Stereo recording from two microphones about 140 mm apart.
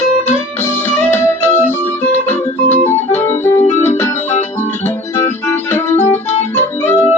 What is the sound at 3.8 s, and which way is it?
Music, 20° left (ahead or behind).